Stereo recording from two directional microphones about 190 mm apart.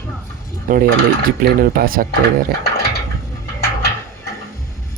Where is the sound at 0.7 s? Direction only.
45° right (ahead or behind).